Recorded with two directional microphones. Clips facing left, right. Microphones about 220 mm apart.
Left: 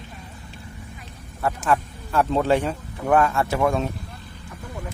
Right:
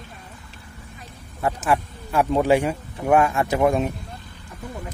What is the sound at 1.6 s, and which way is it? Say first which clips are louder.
A man's voice: left 1 dB; 10° right (ahead or behind).